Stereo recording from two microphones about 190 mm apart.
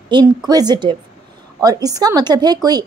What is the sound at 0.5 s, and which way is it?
A woman's voice, 20° right (ahead or behind).